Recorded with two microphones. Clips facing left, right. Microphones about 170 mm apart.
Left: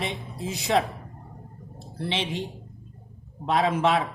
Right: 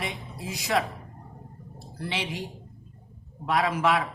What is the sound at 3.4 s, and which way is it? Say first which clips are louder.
Speech: left 2 dB; 25° left (ahead or behind).